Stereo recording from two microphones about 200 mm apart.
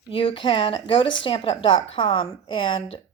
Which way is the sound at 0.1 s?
25° left (ahead or behind).